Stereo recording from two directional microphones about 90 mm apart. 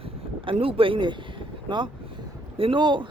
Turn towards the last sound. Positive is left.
turn(degrees=-60)  # may be behind; listen again after turning